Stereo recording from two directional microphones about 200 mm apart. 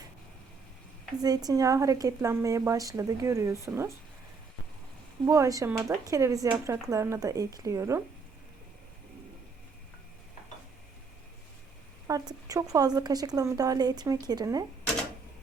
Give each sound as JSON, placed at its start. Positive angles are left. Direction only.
{"t": 1.2, "sound": "a woman's voice", "side_deg": -20}
{"t": 5.2, "sound": "a woman's voice", "side_deg": -15}
{"t": 12.0, "sound": "speech", "side_deg": -15}